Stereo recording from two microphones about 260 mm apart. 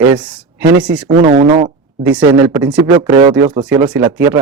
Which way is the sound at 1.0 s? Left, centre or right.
Right.